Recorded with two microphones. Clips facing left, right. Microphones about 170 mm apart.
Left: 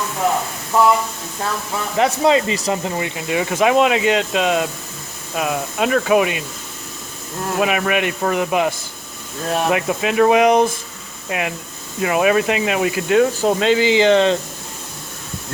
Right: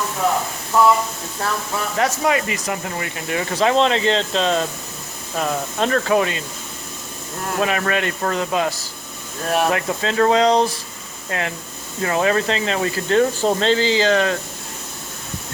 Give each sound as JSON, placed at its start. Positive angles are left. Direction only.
{"t": 2.0, "sound": "speech", "side_deg": 25}
{"t": 7.6, "sound": "speech", "side_deg": 10}